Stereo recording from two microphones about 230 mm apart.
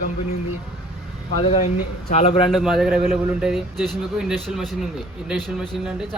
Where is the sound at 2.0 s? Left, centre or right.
Left.